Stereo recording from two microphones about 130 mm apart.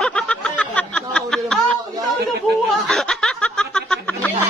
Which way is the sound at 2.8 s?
5° left (ahead or behind).